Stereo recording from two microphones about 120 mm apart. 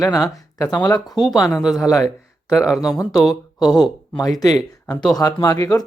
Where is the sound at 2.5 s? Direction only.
5° right (ahead or behind).